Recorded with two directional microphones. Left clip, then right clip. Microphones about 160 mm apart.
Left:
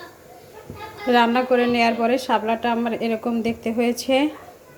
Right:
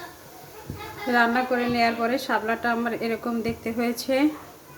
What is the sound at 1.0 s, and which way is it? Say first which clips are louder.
A woman's voice: left 4 dB; 30° left (ahead or behind).